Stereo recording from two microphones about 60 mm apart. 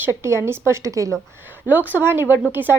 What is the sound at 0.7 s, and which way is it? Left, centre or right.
Speech, right.